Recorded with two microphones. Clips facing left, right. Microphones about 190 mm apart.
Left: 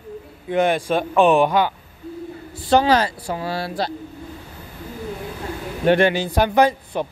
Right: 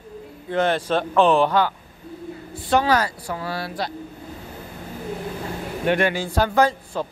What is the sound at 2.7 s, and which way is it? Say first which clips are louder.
Speech: left 3 dB; 25° left (ahead or behind).